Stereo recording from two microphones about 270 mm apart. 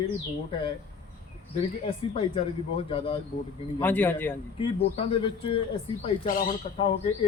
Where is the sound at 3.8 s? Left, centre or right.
Centre.